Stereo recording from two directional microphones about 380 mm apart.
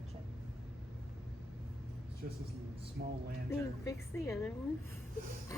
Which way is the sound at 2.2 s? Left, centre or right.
Right.